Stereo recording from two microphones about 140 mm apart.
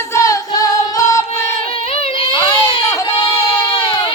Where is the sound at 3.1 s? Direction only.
40° left (ahead or behind).